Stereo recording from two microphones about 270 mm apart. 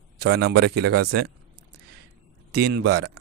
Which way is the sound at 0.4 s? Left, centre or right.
Right.